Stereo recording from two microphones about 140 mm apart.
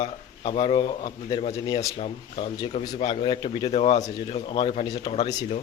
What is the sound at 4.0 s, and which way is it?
Speech, 30° left (ahead or behind).